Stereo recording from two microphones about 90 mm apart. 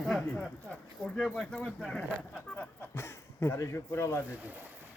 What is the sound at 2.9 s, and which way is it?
Speech, 30° left (ahead or behind).